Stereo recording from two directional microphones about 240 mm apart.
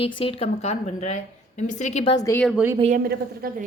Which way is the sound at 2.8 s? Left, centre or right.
Right.